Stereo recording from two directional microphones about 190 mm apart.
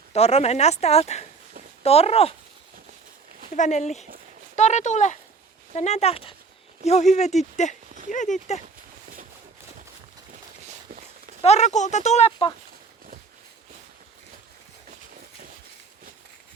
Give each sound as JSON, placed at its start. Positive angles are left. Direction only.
{"t": 0.1, "sound": "speech", "side_deg": 35}
{"t": 3.5, "sound": "speech", "side_deg": 40}
{"t": 11.4, "sound": "speech", "side_deg": 35}
{"t": 14.8, "sound": "a sound", "side_deg": -45}